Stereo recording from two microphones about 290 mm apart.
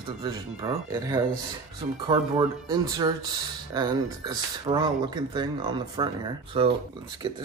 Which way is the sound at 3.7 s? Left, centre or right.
Centre.